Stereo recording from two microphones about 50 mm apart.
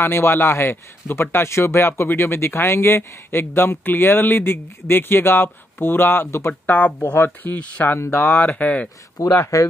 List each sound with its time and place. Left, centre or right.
0.0 s speech: left
6.6 s speech: left
8.0 s speech: left
9.2 s speech: left